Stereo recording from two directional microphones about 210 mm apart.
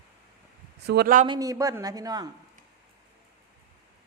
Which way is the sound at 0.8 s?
50° right (ahead or behind).